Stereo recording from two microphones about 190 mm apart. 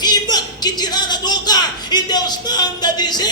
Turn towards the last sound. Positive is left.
turn(degrees=20)  # may be behind; listen again after turning